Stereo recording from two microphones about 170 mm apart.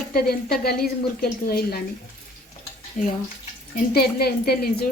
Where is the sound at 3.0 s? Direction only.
50° left (ahead or behind).